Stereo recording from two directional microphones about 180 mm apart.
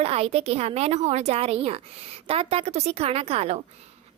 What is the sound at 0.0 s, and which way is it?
A woman's voice, 35° right (ahead or behind).